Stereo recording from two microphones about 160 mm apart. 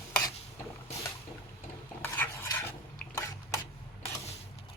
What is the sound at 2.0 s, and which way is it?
Stir, 15° left (ahead or behind).